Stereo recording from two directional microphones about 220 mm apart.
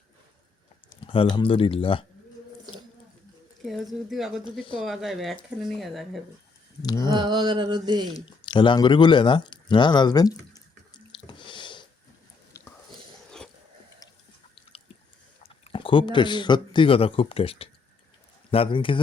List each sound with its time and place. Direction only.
0.9 s speech: 25° left (ahead or behind)
3.6 s speech: centre (ahead or behind)
7.0 s mantra: 20° right (ahead or behind)
8.1 s speech: 20° left (ahead or behind)
11.3 s a sound: 20° left (ahead or behind)
12.9 s biting: 5° left (ahead or behind)
15.4 s speech: 25° left (ahead or behind)